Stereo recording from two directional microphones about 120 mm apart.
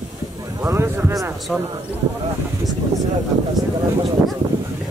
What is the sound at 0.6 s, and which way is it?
Speech, 20° right (ahead or behind).